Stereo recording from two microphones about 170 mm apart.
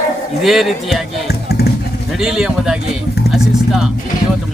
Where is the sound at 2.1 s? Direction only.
5° right (ahead or behind).